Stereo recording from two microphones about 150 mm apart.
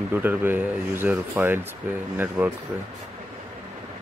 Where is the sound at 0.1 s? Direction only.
15° right (ahead or behind).